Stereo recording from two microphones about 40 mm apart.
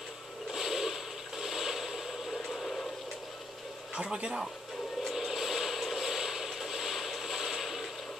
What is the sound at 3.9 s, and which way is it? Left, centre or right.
Speech, right.